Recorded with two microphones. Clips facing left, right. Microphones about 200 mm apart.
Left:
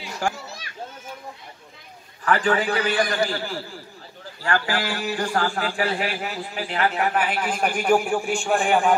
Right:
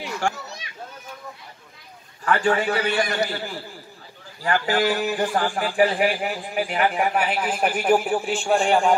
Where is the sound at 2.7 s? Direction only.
25° right (ahead or behind).